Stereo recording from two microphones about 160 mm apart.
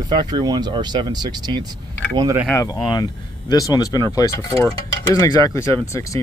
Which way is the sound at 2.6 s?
25° left (ahead or behind).